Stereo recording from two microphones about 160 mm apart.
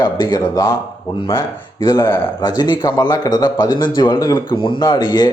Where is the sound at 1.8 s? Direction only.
25° left (ahead or behind).